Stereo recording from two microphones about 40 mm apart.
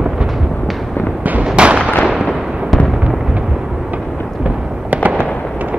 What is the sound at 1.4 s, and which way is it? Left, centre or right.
Artillery fire, right.